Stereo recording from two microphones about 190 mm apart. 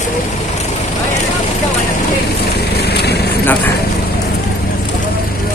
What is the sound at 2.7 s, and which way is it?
Vehicle, 60° left (ahead or behind).